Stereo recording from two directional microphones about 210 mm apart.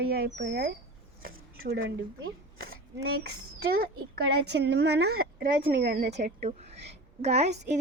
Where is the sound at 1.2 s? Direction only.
50° right (ahead or behind).